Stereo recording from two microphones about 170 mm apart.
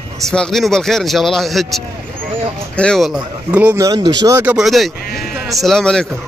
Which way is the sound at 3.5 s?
10° right (ahead or behind).